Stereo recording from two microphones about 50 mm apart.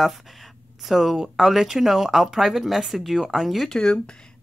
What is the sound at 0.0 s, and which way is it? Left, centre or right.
Speech, centre.